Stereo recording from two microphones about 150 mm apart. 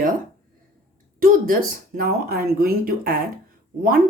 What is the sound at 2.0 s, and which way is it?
Speech, 85° right.